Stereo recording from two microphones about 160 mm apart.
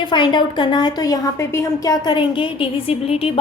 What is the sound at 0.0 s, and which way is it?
A woman's voice, 30° left (ahead or behind).